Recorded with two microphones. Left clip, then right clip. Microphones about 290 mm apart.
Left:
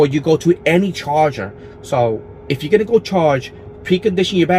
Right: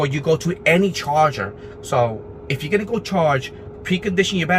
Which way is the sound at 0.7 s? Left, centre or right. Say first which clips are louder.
Left 1 dB; right.